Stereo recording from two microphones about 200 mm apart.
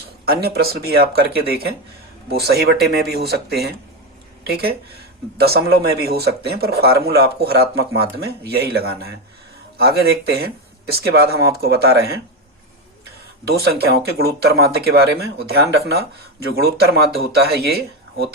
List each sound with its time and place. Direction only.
0.3 s speech: 50° right (ahead or behind)
10.3 s speech: 50° right (ahead or behind)
13.5 s speech: 50° right (ahead or behind)
16.5 s speech: 50° right (ahead or behind)